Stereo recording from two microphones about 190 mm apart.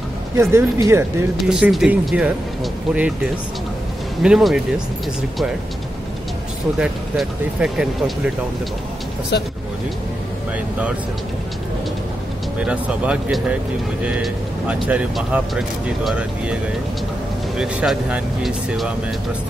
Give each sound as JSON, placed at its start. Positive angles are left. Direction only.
{"t": 0.4, "sound": "speech", "side_deg": -15}
{"t": 1.3, "sound": "speech", "side_deg": 0}
{"t": 4.2, "sound": "speech", "side_deg": 0}
{"t": 6.8, "sound": "speech", "side_deg": -5}
{"t": 9.3, "sound": "speech", "side_deg": 60}
{"t": 12.5, "sound": "speech", "side_deg": -5}
{"t": 17.6, "sound": "speech", "side_deg": -5}